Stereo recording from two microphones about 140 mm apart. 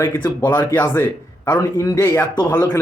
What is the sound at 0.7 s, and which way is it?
A man's voice, 20° left (ahead or behind).